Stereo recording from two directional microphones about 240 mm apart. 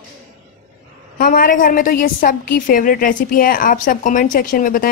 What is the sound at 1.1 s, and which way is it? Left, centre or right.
A woman's voice, left.